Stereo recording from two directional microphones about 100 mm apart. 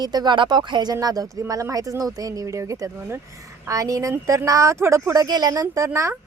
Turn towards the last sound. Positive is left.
turn(degrees=-35)  # may be behind; listen again after turning